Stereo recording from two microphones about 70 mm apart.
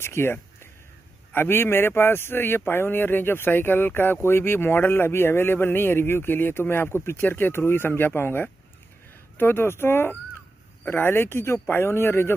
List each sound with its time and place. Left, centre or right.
0.0 s speech: left